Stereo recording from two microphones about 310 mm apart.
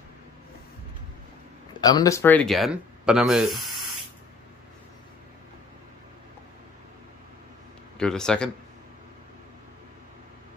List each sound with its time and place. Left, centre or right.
1.8 s speech: centre
8.0 s speech: centre